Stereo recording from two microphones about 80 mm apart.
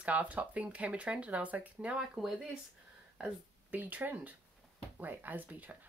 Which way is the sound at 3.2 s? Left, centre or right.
Right.